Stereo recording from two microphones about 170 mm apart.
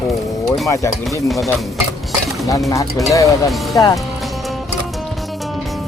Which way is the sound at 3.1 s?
20° left (ahead or behind).